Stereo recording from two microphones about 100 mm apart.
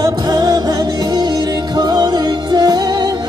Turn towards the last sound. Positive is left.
turn(degrees=-40)  # may be behind; listen again after turning